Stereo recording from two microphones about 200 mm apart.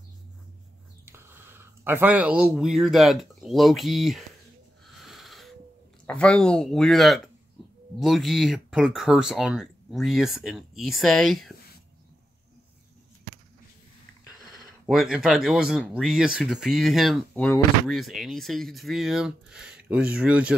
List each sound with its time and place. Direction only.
1.0 s speech: 10° right (ahead or behind)
4.8 s sniff: centre (ahead or behind)
6.0 s speech: 5° left (ahead or behind)
14.6 s speech: centre (ahead or behind)